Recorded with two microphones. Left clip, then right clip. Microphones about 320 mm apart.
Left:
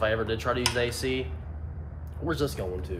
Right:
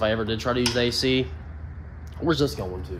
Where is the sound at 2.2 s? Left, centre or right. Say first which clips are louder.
Right 6 dB; right.